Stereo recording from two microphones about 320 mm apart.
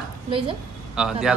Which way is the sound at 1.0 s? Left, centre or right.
Centre.